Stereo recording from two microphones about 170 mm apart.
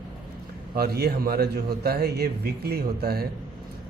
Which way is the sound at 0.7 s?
65° right (ahead or behind).